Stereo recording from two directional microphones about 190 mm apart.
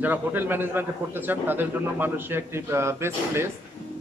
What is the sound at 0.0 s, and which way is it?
Speech, 10° right (ahead or behind).